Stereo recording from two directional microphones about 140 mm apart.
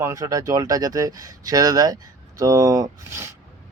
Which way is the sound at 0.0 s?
25° right (ahead or behind).